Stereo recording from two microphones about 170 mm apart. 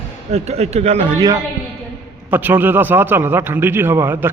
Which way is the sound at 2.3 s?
10° right (ahead or behind).